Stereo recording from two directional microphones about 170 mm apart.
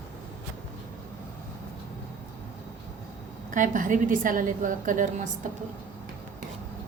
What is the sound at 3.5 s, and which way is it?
A woman's voice, 50° right (ahead or behind).